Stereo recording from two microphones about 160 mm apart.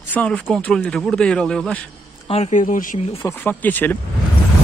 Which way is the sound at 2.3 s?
45° left (ahead or behind).